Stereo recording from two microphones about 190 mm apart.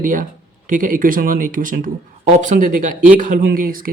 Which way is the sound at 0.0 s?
45° right (ahead or behind).